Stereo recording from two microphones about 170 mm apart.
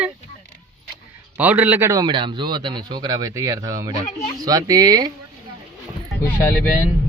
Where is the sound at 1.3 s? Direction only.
10° right (ahead or behind).